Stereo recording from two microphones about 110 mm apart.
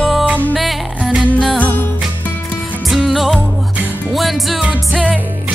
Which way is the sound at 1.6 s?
15° left (ahead or behind).